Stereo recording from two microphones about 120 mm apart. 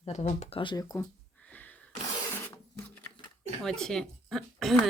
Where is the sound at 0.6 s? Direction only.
35° left (ahead or behind).